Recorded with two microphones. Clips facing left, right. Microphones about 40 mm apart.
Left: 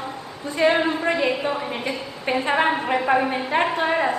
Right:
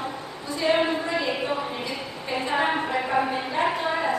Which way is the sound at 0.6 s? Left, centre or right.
Left.